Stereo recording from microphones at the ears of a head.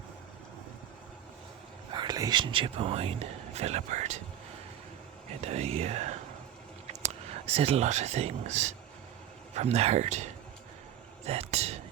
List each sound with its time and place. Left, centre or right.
1.9 s speech: right
5.3 s speech: right
11.3 s a sound: right